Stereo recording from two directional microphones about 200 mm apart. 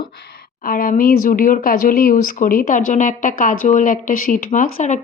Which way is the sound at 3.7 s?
40° left (ahead or behind).